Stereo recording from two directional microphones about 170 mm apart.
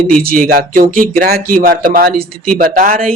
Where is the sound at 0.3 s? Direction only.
60° right (ahead or behind).